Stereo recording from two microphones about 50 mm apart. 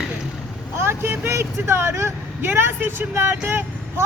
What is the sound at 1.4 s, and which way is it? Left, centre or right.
Vehicle, right.